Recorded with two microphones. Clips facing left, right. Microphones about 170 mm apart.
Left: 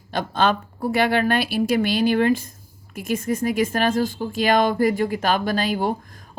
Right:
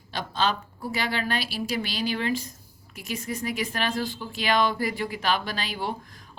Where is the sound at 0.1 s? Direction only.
50° left (ahead or behind).